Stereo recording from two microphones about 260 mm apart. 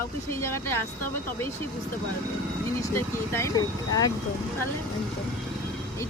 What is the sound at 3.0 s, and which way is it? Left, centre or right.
Speech, centre.